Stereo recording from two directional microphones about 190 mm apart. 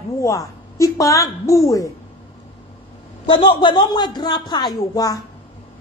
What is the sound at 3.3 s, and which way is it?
A man's voice, 25° left (ahead or behind).